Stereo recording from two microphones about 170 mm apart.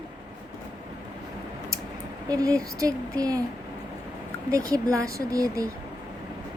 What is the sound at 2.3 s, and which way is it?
Speech, 20° right (ahead or behind).